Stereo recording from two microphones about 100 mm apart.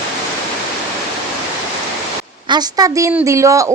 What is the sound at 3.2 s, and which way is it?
Speech, 30° right (ahead or behind).